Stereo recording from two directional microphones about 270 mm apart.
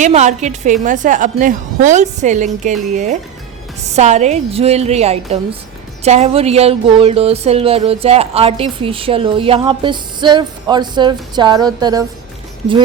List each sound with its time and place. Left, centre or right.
0.0 s speech: right